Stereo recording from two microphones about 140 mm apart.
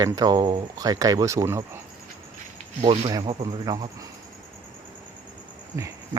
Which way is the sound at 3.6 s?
30° right (ahead or behind).